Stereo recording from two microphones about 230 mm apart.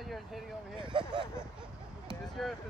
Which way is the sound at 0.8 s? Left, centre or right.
Right.